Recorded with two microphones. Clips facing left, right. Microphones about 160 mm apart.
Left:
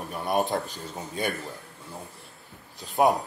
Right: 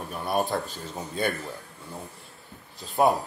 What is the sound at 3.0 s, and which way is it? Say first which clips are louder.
Speech: even; 10° left (ahead or behind).